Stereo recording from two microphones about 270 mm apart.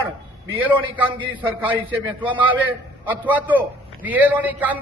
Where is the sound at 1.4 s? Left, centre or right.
Centre.